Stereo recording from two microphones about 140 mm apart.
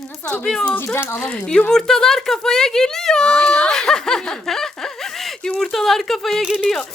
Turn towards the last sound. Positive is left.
turn(degrees=0)  # may be behind; listen again after turning